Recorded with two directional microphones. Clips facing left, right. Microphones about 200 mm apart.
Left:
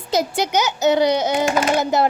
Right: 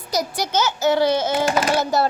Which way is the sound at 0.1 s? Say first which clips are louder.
Left 3 dB; 25° left (ahead or behind).